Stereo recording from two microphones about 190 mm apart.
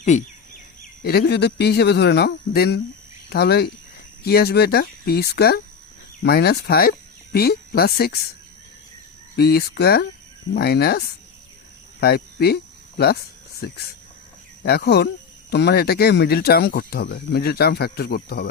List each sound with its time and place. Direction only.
0.0 s turkey: 40° left (ahead or behind)
1.0 s speech: 60° left (ahead or behind)
9.3 s speech: 55° left (ahead or behind)
13.6 s speech: 55° left (ahead or behind)